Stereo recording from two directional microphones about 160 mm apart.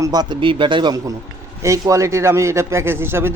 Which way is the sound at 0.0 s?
25° right (ahead or behind).